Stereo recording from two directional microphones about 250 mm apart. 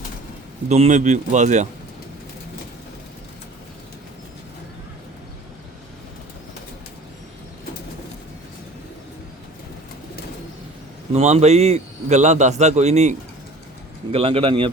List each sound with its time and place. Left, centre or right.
0.7 s a man's voice: right
11.1 s a man's voice: right